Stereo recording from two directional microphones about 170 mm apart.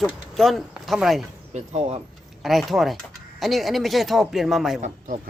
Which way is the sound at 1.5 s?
40° right (ahead or behind).